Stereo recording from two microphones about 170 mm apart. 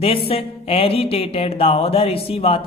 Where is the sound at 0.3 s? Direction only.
35° left (ahead or behind).